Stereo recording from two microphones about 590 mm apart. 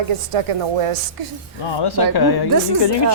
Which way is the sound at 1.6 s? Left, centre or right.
Left.